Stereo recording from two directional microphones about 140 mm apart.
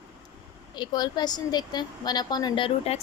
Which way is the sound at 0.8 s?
30° left (ahead or behind).